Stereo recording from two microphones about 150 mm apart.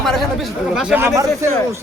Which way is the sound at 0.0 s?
Centre (ahead or behind).